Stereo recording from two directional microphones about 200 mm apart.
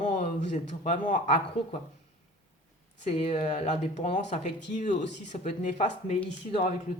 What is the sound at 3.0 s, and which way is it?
Speech, 35° left (ahead or behind).